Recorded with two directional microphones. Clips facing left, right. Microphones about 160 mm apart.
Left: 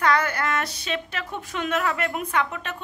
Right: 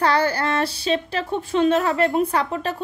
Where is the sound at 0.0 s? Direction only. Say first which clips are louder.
Right 3 dB; 30° right (ahead or behind).